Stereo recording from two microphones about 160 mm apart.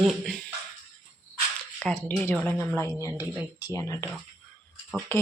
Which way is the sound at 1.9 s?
10° left (ahead or behind).